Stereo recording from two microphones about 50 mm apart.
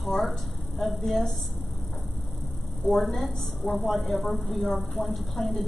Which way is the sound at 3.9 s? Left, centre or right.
Centre.